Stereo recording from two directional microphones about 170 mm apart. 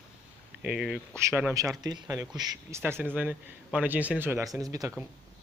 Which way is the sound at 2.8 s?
10° right (ahead or behind).